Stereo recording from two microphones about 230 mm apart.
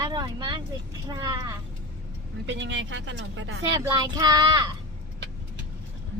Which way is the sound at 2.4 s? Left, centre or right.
Right.